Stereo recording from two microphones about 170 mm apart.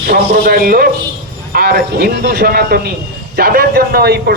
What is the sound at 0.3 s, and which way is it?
A man's voice, 55° right (ahead or behind).